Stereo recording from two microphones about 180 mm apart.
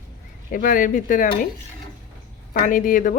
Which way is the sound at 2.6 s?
50° left (ahead or behind).